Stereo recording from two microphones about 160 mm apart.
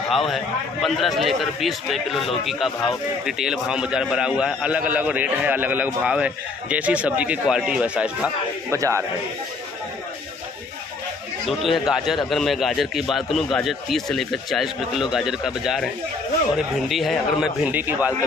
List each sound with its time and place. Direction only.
0.1 s a man's voice: centre (ahead or behind)
8.7 s a man's voice: 20° right (ahead or behind)
11.4 s a man's voice: centre (ahead or behind)